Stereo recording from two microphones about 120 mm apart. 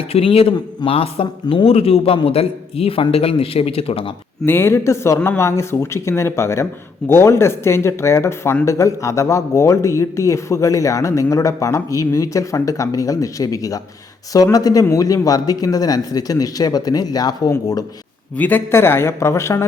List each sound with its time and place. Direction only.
0.1 s a man's voice: 55° left (ahead or behind)
0.5 s speech: 35° left (ahead or behind)
0.9 s a man's voice: 50° left (ahead or behind)
4.4 s speech: 20° left (ahead or behind)
18.3 s speech: 15° left (ahead or behind)